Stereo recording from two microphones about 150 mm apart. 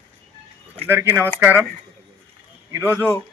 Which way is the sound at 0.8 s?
15° right (ahead or behind).